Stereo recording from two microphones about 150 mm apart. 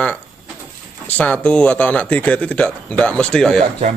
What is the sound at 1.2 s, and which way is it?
Speech, 10° left (ahead or behind).